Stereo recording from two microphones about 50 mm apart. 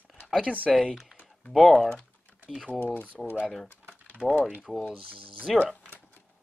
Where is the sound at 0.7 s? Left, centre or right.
Centre.